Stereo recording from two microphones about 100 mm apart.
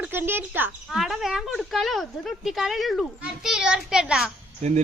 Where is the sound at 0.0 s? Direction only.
20° right (ahead or behind).